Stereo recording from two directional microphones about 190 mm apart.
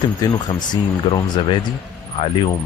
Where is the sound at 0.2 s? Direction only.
20° left (ahead or behind).